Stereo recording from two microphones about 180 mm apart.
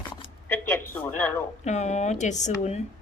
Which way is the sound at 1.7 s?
40° left (ahead or behind).